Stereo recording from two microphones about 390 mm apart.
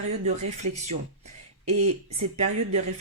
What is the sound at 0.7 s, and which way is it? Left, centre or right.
Speech, centre.